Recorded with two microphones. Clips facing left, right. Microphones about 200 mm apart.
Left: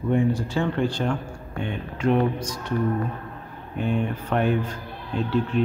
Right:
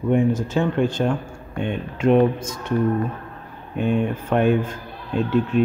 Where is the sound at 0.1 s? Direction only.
20° right (ahead or behind).